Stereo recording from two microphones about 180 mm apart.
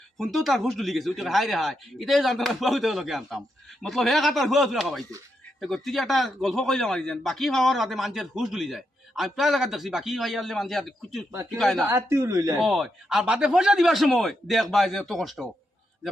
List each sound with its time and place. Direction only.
0.2 s a man's voice: centre (ahead or behind)
11.9 s speech: 15° right (ahead or behind)
12.5 s a man's voice: centre (ahead or behind)